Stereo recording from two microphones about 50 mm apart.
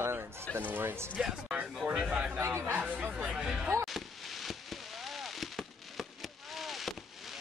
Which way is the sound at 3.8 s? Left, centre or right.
Centre.